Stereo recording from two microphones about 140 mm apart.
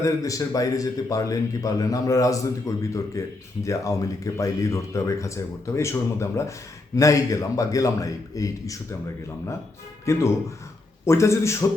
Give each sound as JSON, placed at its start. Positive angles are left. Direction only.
{"t": 0.0, "sound": "a man's voice", "side_deg": 25}
{"t": 10.1, "sound": "a man's voice", "side_deg": 20}